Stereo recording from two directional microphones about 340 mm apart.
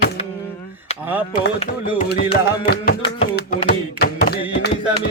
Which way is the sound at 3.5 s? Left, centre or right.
Left.